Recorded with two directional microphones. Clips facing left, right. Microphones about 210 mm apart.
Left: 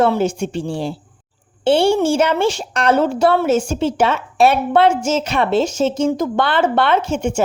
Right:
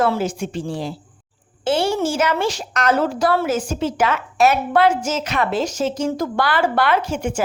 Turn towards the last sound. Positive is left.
turn(degrees=25)  # may be behind; listen again after turning